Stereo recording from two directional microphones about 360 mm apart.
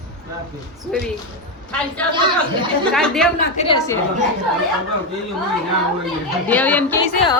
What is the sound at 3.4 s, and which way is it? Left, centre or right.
Speech, centre.